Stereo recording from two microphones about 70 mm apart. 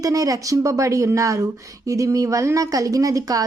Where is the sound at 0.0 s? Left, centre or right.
Right.